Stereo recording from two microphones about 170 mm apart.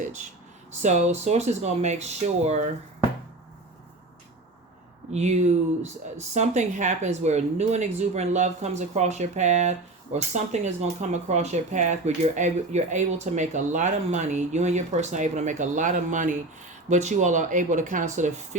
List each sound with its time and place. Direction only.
0.0 s speech: 45° right (ahead or behind)
5.1 s speech: 40° right (ahead or behind)